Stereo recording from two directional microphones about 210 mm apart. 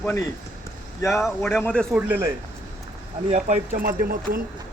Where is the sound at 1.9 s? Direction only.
10° right (ahead or behind).